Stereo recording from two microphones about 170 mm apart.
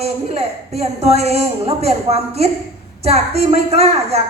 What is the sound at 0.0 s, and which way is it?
A woman's voice, 35° right (ahead or behind).